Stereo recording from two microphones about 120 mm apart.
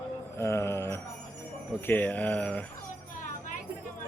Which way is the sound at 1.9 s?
15° left (ahead or behind).